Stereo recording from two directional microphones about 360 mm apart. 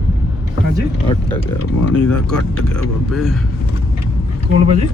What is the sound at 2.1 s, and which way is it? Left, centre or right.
Speech, centre.